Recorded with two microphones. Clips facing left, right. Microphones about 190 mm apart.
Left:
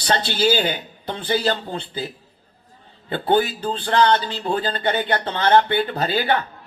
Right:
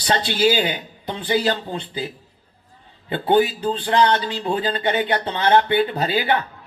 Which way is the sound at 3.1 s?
15° right (ahead or behind).